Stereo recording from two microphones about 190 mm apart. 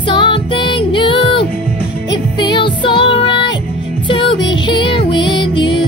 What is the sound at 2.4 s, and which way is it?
Music, 25° left (ahead or behind).